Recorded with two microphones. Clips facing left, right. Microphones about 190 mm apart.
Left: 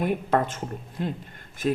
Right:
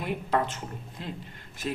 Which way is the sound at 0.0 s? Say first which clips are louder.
Left 4 dB; 50° left (ahead or behind).